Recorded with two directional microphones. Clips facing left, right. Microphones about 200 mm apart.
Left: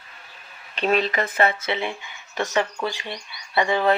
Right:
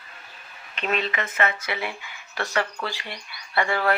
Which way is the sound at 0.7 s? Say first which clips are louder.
Left 5 dB; 35° left (ahead or behind).